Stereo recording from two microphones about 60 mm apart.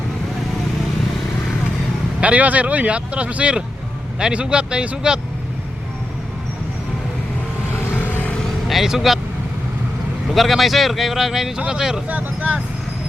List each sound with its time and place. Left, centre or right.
2.2 s a man's voice: right
8.6 s speech: centre
10.3 s a man's voice: centre
12.0 s speech: right